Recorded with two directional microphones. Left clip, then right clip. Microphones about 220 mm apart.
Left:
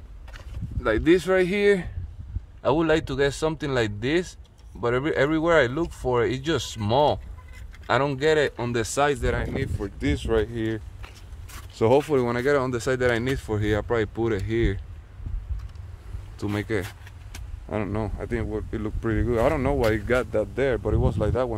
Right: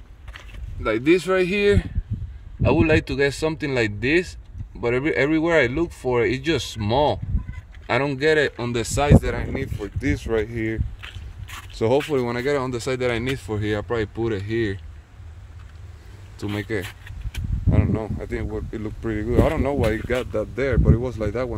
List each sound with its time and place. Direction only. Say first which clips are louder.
0.8 s speech: right 1 dB; 5° right (ahead or behind)
16.3 s speech: even; centre (ahead or behind)
16.8 s vehicle: right 3 dB; 15° left (ahead or behind)
17.6 s speech: right 2 dB; centre (ahead or behind)